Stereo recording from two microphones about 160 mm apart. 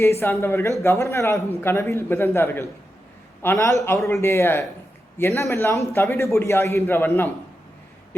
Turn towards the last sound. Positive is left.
turn(degrees=15)  # may be behind; listen again after turning